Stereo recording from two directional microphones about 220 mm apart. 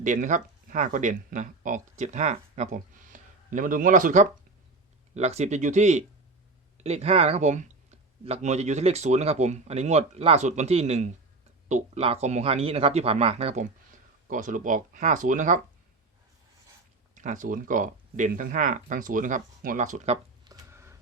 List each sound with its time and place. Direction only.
0.0 s speech: 35° right (ahead or behind)
17.2 s speech: 35° right (ahead or behind)
20.4 s a sound: 15° right (ahead or behind)